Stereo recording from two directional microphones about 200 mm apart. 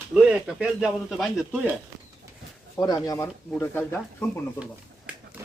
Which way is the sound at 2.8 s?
20° left (ahead or behind).